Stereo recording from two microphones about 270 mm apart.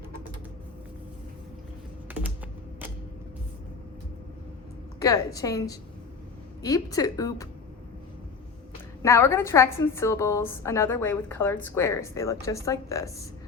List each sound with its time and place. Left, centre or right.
4.9 s a woman's voice: centre
9.0 s a woman's voice: centre